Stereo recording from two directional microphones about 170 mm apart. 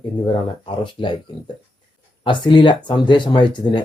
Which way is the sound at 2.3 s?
30° left (ahead or behind).